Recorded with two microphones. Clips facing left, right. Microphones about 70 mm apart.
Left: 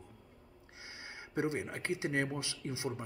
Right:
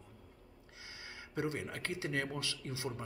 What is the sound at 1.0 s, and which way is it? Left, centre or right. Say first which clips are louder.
Speech: left 3 dB; left.